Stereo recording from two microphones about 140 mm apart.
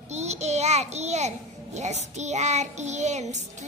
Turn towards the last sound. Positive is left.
turn(degrees=-60)  # may be behind; listen again after turning